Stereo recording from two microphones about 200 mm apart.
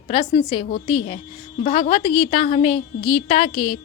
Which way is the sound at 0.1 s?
25° left (ahead or behind).